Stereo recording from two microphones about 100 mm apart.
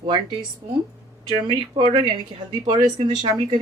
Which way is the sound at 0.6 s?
90° right.